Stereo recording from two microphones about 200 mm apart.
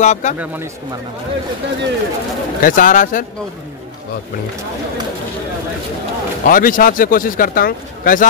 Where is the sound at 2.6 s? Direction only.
40° left (ahead or behind).